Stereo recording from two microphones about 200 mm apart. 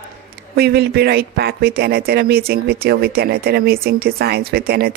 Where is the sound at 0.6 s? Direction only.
55° right (ahead or behind).